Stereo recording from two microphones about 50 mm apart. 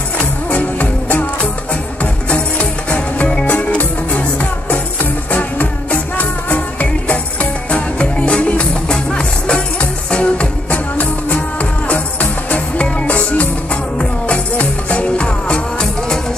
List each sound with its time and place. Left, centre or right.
0.5 s music: left
2.2 s music: left
7.7 s music: left